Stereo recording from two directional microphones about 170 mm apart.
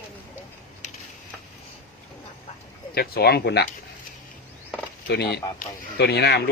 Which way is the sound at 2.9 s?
65° left (ahead or behind).